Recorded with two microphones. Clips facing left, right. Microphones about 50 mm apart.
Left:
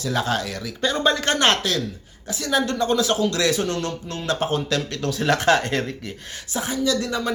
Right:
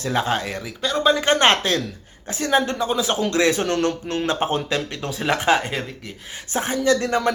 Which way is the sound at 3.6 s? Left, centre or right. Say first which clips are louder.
Right 4 dB; right.